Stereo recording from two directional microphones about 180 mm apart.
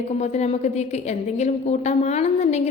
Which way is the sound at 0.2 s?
40° left (ahead or behind).